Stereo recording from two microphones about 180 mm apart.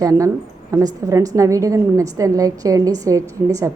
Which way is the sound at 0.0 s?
20° right (ahead or behind).